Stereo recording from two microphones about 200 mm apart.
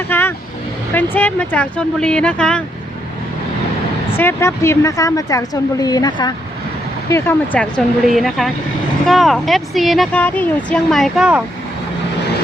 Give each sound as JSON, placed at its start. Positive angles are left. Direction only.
{"t": 0.1, "sound": "speech", "side_deg": 10}
{"t": 4.2, "sound": "speech", "side_deg": 10}
{"t": 7.1, "sound": "speech", "side_deg": 10}